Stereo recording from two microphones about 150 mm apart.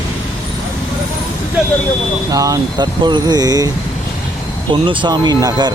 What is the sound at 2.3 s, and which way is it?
Speech, 25° right (ahead or behind).